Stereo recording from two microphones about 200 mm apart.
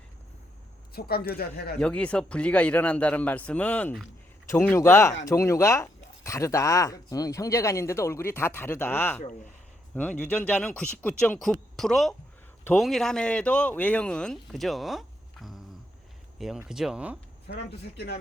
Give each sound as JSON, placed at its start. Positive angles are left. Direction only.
{"t": 0.9, "sound": "speech", "side_deg": 50}
{"t": 1.8, "sound": "speech", "side_deg": 5}
{"t": 17.4, "sound": "speech", "side_deg": 55}